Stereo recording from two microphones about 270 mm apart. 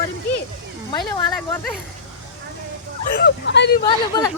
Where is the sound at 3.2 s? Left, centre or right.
Left.